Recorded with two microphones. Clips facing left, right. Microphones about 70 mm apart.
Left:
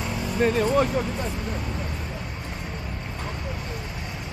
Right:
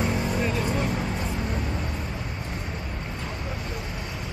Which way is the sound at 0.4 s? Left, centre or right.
Left.